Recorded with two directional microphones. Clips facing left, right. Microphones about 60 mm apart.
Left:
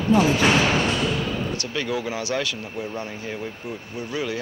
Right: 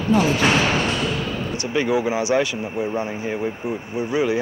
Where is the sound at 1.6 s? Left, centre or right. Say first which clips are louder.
Right 6 dB; right.